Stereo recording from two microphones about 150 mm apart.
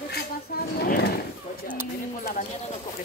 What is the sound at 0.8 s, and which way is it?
Speech, 90° left.